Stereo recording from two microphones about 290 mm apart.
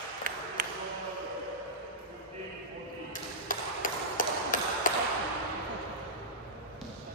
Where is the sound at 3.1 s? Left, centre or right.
Left.